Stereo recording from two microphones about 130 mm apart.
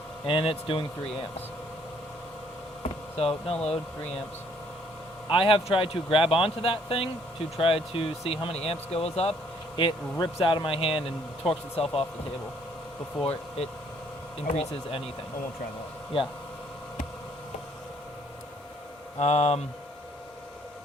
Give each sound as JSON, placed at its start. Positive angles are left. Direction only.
{"t": 0.3, "sound": "speech", "side_deg": 40}
{"t": 3.2, "sound": "speech", "side_deg": 50}
{"t": 5.3, "sound": "speech", "side_deg": 45}
{"t": 9.7, "sound": "speech", "side_deg": 35}
{"t": 14.5, "sound": "speech", "side_deg": 50}
{"t": 19.2, "sound": "speech", "side_deg": 55}